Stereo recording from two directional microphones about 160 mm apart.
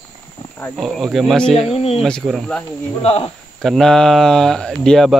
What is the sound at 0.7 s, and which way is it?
Speech, centre (ahead or behind).